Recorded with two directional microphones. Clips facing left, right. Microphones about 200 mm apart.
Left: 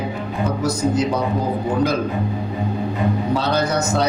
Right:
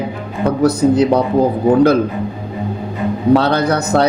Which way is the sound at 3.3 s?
60° right (ahead or behind).